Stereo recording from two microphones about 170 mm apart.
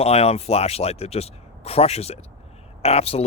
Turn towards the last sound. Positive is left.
turn(degrees=35)  # may be behind; listen again after turning